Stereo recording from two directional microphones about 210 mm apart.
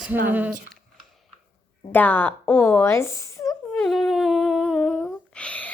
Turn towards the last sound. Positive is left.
turn(degrees=5)  # may be behind; listen again after turning